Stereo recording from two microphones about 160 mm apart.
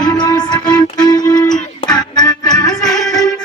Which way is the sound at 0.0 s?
25° left (ahead or behind).